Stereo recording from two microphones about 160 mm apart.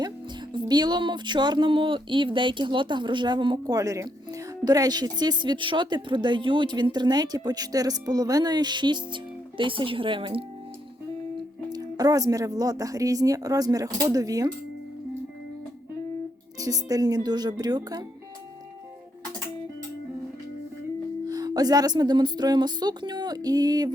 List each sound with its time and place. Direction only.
0.5 s speech: 25° right (ahead or behind)
11.7 s speech: 25° right (ahead or behind)
16.6 s speech: 20° right (ahead or behind)
21.2 s speech: 25° right (ahead or behind)